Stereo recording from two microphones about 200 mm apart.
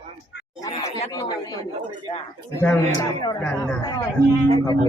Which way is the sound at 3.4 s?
5° left (ahead or behind).